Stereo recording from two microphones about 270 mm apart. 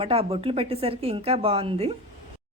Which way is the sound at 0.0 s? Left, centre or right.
Right.